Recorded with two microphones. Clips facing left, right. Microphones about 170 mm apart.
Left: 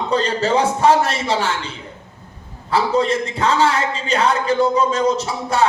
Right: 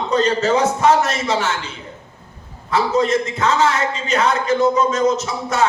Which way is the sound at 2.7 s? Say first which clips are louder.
Even; 30° left (ahead or behind).